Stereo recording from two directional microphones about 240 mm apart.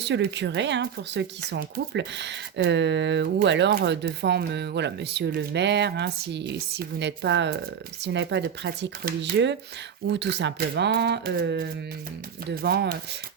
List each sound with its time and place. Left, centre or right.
0.0 s speech: right